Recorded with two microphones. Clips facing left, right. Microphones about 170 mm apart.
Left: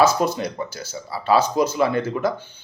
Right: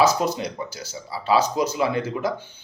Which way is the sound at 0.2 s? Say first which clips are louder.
Left 2 dB; 55° left (ahead or behind).